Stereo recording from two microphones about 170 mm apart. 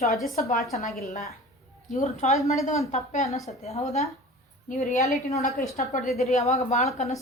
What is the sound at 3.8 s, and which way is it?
A woman's voice, 40° left (ahead or behind).